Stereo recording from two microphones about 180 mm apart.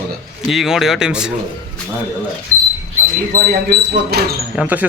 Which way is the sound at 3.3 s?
55° right (ahead or behind).